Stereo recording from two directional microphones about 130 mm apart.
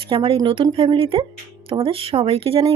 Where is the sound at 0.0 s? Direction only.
45° right (ahead or behind).